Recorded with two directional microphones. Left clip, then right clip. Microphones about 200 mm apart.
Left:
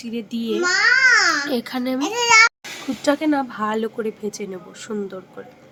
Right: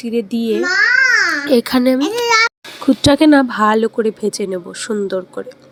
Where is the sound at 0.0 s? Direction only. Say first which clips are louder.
Right 9 dB; 30° right (ahead or behind).